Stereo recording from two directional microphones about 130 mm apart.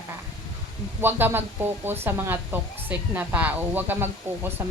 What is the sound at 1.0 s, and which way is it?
Speech, 15° right (ahead or behind).